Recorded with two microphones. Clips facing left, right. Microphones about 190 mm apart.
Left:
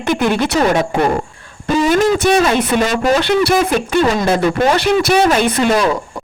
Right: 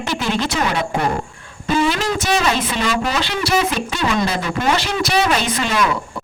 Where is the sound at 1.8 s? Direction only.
55° left (ahead or behind).